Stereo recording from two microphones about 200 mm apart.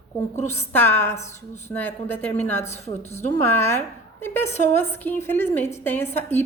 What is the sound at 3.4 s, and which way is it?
A woman's voice, 15° left (ahead or behind).